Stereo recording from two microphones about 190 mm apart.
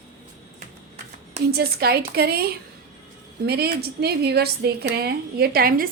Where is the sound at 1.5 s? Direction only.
55° right (ahead or behind).